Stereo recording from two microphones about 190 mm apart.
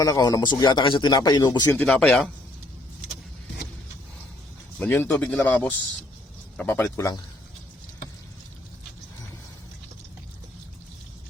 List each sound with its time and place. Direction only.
0.0 s a man's voice: 20° left (ahead or behind); by 2.3 s centre (ahead or behind)
4.8 s speech: 10° left (ahead or behind)